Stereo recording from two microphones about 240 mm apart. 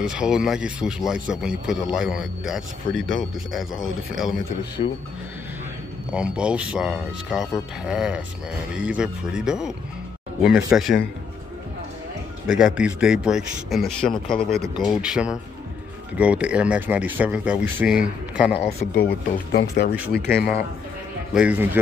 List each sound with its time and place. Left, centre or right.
0.0 s speech: centre
4.8 s speech: left
6.1 s speech: centre
12.4 s speech: centre
18.6 s speech: left
20.0 s speech: centre
20.2 s speech: left
21.3 s speech: centre